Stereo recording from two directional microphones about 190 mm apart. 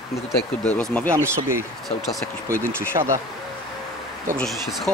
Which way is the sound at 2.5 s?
15° right (ahead or behind).